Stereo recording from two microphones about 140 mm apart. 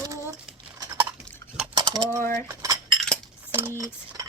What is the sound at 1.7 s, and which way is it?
Typing, 30° right (ahead or behind).